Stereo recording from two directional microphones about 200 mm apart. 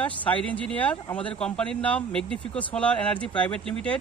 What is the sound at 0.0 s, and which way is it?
Speech, 5° left (ahead or behind).